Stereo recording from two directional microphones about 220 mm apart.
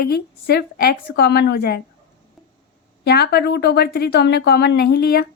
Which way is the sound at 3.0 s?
45° left (ahead or behind).